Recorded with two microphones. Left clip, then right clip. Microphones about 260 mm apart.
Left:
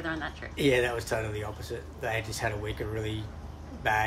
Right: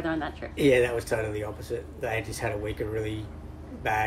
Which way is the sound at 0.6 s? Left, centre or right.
Centre.